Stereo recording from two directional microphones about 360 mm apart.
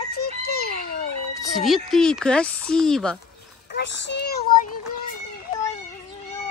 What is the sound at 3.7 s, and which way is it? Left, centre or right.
Child singing, left.